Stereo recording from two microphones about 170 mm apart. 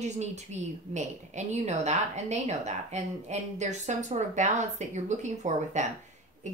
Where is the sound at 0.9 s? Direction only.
40° right (ahead or behind).